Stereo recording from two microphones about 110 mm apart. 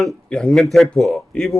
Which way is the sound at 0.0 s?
10° left (ahead or behind).